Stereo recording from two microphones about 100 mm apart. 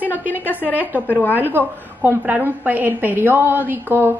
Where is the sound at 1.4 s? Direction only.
20° right (ahead or behind).